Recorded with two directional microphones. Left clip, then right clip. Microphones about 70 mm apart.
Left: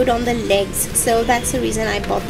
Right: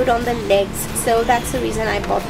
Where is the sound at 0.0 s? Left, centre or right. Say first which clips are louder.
Even; left.